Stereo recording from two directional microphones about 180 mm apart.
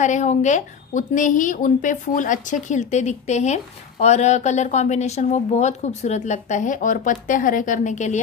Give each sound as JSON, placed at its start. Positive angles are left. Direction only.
{"t": 0.0, "sound": "a woman's voice", "side_deg": 40}